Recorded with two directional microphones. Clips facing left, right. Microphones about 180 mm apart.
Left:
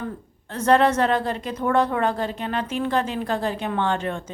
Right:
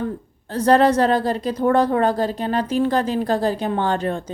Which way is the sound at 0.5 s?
35° right (ahead or behind).